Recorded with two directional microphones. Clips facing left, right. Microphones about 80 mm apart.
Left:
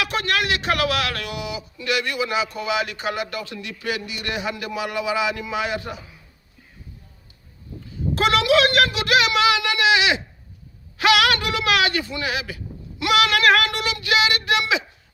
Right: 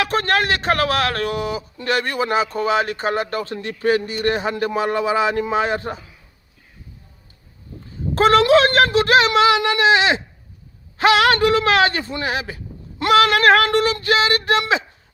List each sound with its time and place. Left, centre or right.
0.0 s a man's voice: right
8.1 s a sound: right
10.9 s a man's voice: right